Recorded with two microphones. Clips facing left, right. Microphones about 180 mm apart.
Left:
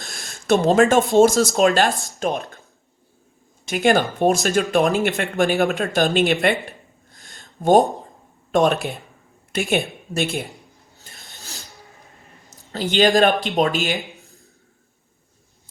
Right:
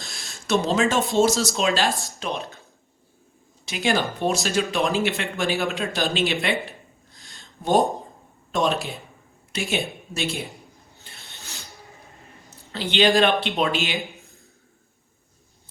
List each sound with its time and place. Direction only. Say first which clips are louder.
0.4 s speech: left 6 dB; 50° left (ahead or behind)
3.7 s speech: left 6 dB; 50° left (ahead or behind)
6.4 s a sound: left 5 dB; 55° left (ahead or behind)
8.5 s a woman's voice: left 5 dB; 55° left (ahead or behind)
10.9 s filing: left 3 dB; 40° left (ahead or behind)
12.7 s speech: left 3 dB; 45° left (ahead or behind)